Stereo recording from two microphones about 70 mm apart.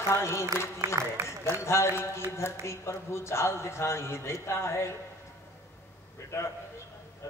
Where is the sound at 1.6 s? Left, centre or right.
Left.